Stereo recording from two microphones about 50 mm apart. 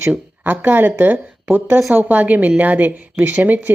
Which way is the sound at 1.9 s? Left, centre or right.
Right.